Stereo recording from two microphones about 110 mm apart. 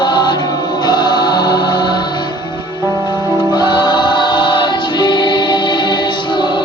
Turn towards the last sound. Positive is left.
turn(degrees=45)  # may be behind; listen again after turning